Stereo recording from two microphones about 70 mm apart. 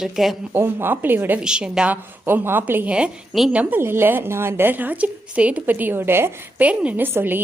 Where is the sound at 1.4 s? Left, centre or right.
Centre.